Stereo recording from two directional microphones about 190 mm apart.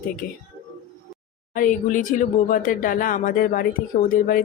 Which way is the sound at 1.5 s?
45° left (ahead or behind).